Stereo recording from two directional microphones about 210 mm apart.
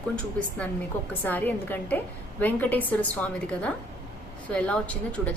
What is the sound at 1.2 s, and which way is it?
A woman's voice, 10° left (ahead or behind).